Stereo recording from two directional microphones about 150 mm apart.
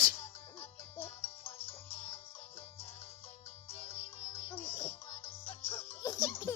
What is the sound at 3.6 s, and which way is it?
Music, 40° left (ahead or behind).